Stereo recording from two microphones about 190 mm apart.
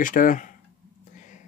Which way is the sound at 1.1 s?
40° left (ahead or behind).